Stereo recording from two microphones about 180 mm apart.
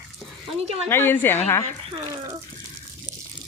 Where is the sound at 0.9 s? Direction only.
10° left (ahead or behind).